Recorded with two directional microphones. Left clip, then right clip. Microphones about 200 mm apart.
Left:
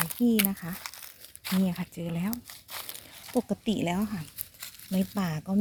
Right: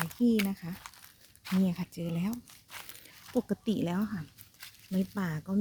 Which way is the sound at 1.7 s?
10° right (ahead or behind).